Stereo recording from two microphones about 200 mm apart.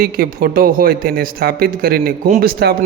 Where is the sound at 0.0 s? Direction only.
45° right (ahead or behind).